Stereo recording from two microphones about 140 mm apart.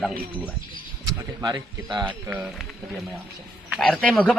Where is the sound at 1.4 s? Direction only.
30° right (ahead or behind).